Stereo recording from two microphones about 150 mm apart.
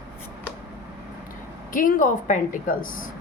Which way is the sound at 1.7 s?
65° left (ahead or behind).